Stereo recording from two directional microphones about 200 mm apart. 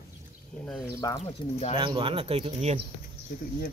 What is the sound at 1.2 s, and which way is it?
Speech, 30° left (ahead or behind).